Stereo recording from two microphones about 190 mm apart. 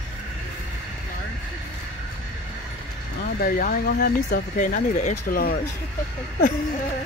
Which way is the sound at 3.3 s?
50° left (ahead or behind).